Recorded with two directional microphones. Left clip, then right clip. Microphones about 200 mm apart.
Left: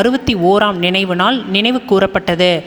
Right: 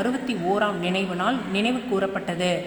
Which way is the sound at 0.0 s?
35° left (ahead or behind).